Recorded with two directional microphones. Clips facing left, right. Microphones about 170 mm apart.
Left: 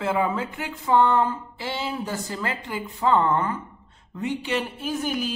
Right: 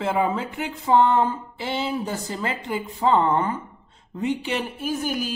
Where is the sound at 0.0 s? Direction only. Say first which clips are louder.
Right 1 dB; 20° right (ahead or behind).